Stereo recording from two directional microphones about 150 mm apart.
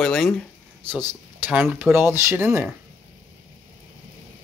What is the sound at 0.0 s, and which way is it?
Speech, 5° left (ahead or behind).